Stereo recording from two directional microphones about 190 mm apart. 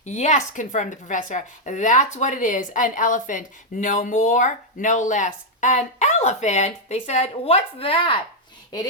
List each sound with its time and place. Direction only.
0.0 s speech: 40° left (ahead or behind)